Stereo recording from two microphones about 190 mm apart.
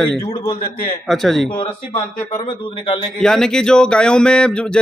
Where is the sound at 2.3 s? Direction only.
25° left (ahead or behind).